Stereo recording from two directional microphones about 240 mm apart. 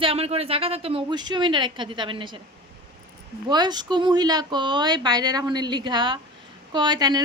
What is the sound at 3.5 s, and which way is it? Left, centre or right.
Speech, centre.